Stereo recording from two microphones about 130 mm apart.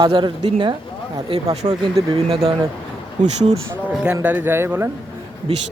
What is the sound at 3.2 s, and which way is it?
Speech, 70° right (ahead or behind).